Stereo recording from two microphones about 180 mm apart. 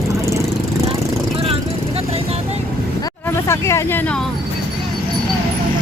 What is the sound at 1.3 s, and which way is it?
Vehicle, 30° right (ahead or behind).